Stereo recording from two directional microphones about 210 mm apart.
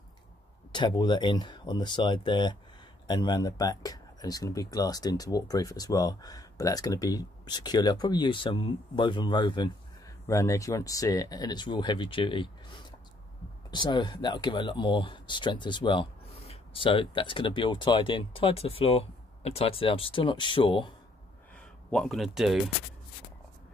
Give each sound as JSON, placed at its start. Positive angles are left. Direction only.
{"t": 0.7, "sound": "speech", "side_deg": 20}
{"t": 13.7, "sound": "speech", "side_deg": 20}
{"t": 21.5, "sound": "speech", "side_deg": 0}